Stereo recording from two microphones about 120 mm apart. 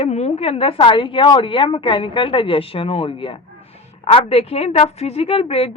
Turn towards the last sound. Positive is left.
turn(degrees=55)  # may be behind; listen again after turning